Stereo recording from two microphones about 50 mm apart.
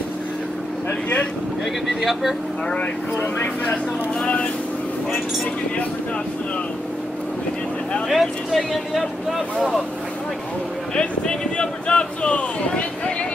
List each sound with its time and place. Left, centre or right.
8.1 s speech: centre
11.0 s speech: centre